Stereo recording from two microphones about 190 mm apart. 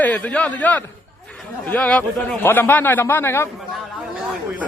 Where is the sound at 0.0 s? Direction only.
5° left (ahead or behind).